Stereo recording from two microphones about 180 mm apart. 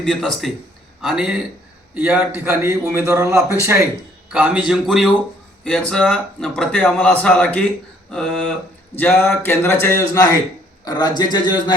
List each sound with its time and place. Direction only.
0.0 s a man's voice: centre (ahead or behind); by 11.7 s 25° left (ahead or behind)